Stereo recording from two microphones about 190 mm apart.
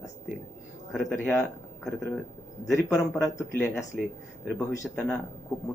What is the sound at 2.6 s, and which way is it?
Speech, 5° left (ahead or behind).